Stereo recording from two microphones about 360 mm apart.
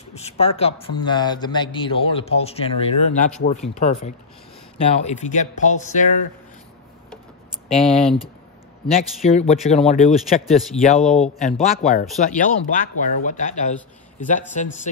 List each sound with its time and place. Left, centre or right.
0.1 s a man's voice: centre
7.7 s speech: centre
9.2 s a man's voice: centre
11.0 s speech: centre
11.4 s speech: centre